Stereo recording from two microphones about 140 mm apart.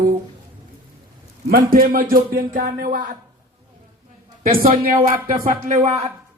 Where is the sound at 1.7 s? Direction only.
90° right.